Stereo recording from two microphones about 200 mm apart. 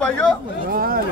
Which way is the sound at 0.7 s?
45° right (ahead or behind).